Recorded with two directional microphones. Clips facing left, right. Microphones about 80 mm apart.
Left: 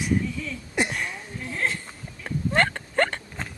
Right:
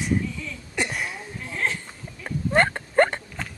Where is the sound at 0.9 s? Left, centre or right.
Centre.